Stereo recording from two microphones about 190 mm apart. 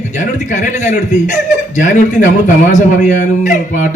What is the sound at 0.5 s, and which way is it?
A man's voice, 40° left (ahead or behind).